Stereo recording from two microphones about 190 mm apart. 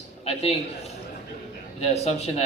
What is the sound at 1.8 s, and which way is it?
Speech, 35° left (ahead or behind).